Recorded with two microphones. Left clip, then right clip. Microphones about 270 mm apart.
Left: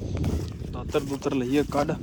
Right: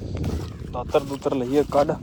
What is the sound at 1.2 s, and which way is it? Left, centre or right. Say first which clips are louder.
Speech: right 4 dB; left.